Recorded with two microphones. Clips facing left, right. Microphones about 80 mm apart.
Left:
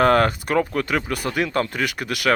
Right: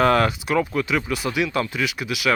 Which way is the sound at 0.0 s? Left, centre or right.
Left.